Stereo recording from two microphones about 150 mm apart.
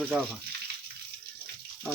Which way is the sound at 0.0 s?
10° right (ahead or behind).